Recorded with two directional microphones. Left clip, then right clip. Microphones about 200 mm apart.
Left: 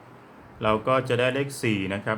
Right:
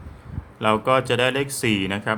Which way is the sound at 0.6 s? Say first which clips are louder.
Right 4 dB; 25° right (ahead or behind).